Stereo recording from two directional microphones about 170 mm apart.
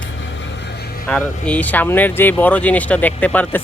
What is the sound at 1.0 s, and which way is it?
Speech, 5° left (ahead or behind).